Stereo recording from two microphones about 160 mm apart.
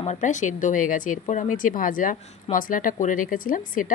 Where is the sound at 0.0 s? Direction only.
50° left (ahead or behind).